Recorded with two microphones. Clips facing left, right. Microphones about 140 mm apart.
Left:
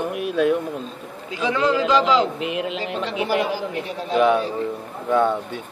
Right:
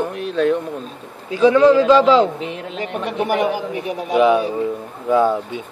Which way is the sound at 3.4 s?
20° right (ahead or behind).